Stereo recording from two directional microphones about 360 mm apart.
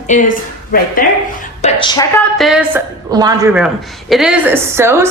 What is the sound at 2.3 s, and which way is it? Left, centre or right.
Speech, centre.